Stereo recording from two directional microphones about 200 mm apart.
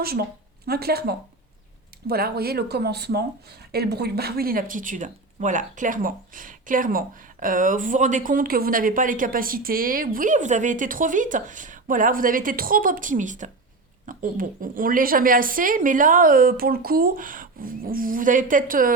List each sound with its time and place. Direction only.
0.0 s speech: 50° right (ahead or behind)